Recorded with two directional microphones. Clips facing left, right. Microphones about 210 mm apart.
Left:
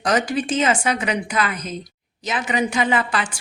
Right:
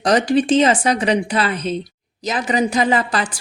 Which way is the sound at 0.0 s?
35° right (ahead or behind).